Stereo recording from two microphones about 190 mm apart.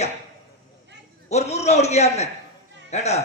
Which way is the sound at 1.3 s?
35° left (ahead or behind).